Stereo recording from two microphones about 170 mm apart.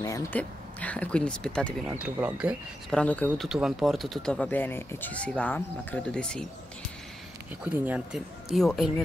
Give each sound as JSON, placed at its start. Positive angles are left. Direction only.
{"t": 0.0, "sound": "speech", "side_deg": 20}
{"t": 0.4, "sound": "speech", "side_deg": 10}
{"t": 2.0, "sound": "speech", "side_deg": -5}
{"t": 3.0, "sound": "speech", "side_deg": 10}
{"t": 3.3, "sound": "speech", "side_deg": 0}
{"t": 7.6, "sound": "speech", "side_deg": -10}